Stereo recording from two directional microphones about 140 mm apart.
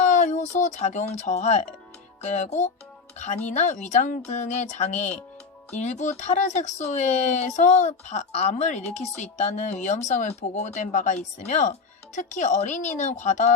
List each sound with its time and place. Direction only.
0.0 s speech: 60° left (ahead or behind)